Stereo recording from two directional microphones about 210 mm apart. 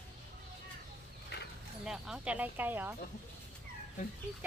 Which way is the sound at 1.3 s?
50° left (ahead or behind).